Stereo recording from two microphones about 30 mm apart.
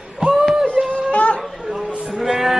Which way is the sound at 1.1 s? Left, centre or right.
Left.